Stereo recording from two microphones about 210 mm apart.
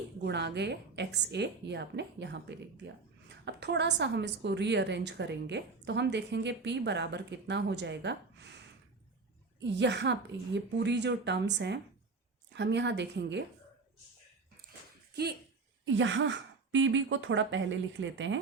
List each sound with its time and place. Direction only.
0.3 s a woman's voice: 55° right (ahead or behind)
9.6 s a woman's voice: 55° right (ahead or behind)
15.1 s speech: 50° right (ahead or behind)
16.0 s a woman's voice: 60° right (ahead or behind)